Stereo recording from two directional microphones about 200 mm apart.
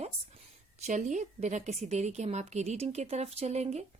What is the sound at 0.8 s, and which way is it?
Speech, 35° right (ahead or behind).